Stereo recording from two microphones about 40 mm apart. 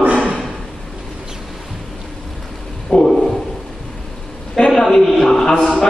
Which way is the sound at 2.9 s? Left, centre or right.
Left.